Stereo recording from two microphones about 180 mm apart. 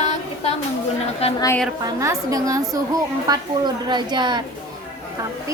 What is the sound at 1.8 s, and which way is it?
A woman's voice, 20° right (ahead or behind).